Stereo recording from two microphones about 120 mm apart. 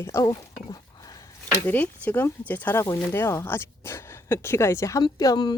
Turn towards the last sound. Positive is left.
turn(degrees=35)  # may be behind; listen again after turning